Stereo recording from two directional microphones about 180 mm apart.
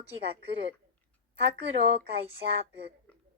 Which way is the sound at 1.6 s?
30° right (ahead or behind).